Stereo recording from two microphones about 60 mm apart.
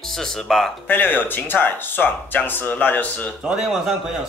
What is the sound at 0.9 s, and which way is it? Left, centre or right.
Speech, left.